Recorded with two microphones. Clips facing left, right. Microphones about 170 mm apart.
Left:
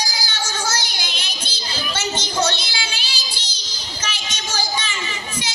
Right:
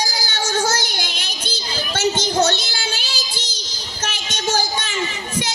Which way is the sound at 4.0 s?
55° right (ahead or behind).